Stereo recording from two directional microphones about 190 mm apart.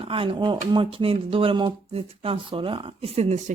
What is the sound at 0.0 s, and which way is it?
Speech, 30° right (ahead or behind).